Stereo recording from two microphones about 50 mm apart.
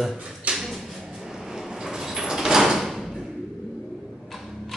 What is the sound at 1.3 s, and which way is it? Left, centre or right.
Door, centre.